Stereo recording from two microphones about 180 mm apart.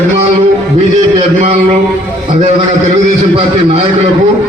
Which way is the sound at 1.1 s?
35° right (ahead or behind).